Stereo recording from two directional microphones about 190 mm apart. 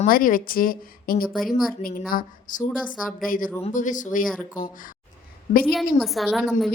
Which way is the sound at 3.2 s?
45° left (ahead or behind).